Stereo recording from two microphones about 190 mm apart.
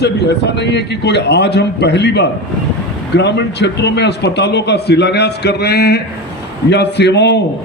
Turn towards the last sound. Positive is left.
turn(degrees=65)  # may be behind; listen again after turning